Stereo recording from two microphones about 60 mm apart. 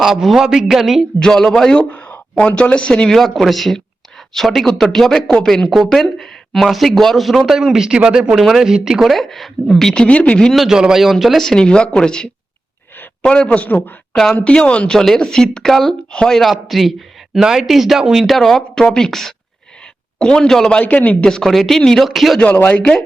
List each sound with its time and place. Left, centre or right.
0.0 s speech: centre
1.2 s speech: centre
1.9 s speech: left; by 7.6 s centre
7.6 s speech: centre; by 10.4 s left
10.5 s speech: centre
11.4 s speech: centre
14.8 s speech: centre
20.7 s speech: left
21.2 s speech: centre
22.7 s speech: centre